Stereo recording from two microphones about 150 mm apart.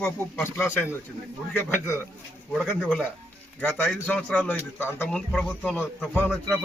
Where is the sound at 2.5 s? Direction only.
Centre (ahead or behind).